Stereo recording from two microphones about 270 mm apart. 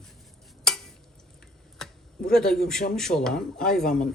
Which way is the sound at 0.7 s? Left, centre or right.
Centre.